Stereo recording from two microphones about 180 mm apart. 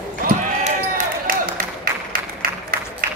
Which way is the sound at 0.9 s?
50° right (ahead or behind).